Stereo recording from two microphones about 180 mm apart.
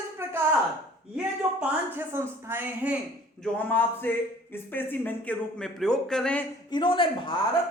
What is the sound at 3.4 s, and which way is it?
Speech, 10° left (ahead or behind).